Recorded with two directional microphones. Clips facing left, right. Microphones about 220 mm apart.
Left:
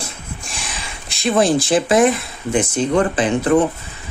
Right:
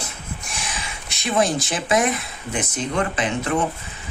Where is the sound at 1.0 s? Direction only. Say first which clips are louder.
Left 5 dB; 30° left (ahead or behind).